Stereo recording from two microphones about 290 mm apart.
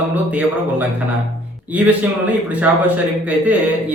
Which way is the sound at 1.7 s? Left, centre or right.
Centre.